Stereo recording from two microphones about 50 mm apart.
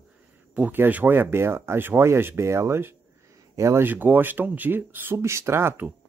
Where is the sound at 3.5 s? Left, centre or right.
Right.